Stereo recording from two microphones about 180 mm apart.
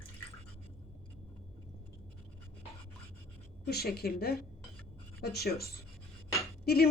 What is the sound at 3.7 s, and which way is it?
A woman's voice, 60° left (ahead or behind).